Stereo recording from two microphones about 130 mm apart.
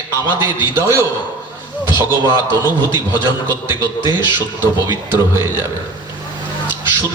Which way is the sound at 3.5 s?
25° right (ahead or behind).